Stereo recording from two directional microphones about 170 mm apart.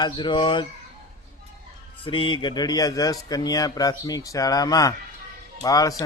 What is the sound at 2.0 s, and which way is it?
Speech, 30° left (ahead or behind).